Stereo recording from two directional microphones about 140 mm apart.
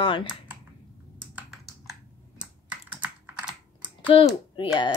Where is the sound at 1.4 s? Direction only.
Centre (ahead or behind).